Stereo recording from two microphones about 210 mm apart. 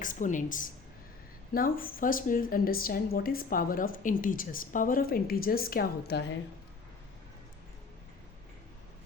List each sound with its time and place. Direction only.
0.0 s a woman's voice: 40° left (ahead or behind)